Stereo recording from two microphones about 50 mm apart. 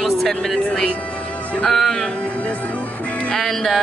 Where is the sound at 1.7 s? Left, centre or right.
Centre.